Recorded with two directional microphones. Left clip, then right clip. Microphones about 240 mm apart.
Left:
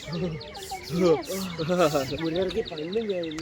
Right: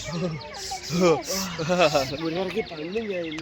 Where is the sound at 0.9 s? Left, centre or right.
Right.